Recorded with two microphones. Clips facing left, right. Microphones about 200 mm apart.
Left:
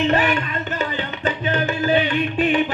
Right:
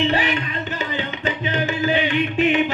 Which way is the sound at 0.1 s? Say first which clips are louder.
Left 3 dB; 40° left (ahead or behind).